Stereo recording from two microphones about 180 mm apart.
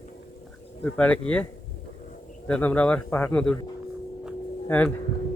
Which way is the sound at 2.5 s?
10° left (ahead or behind).